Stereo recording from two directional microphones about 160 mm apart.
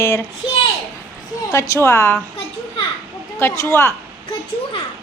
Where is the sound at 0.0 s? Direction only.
15° left (ahead or behind).